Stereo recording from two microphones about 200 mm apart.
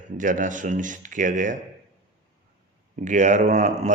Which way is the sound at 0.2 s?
40° right (ahead or behind).